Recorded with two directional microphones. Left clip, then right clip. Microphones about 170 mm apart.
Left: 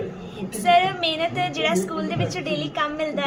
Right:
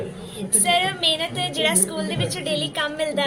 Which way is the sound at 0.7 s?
Centre (ahead or behind).